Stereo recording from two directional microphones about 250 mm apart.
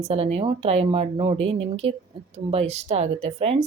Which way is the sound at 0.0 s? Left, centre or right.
Right.